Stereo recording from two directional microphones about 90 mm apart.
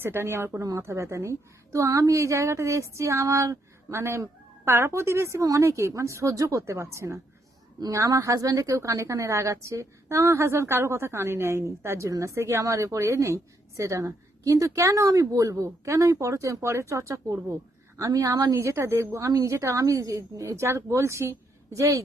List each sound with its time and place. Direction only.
0.0 s a woman's voice: 25° right (ahead or behind)